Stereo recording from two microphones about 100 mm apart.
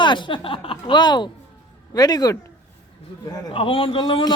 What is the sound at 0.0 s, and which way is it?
A man's voice, 50° left (ahead or behind).